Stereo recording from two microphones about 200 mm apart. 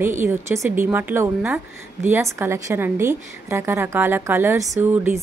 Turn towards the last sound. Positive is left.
turn(degrees=-10)  # may be behind; listen again after turning